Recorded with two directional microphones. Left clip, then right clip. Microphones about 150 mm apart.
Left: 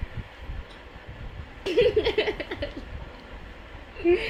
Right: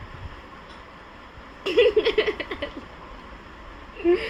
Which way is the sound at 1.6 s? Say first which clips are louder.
Right 3 dB; 5° right (ahead or behind).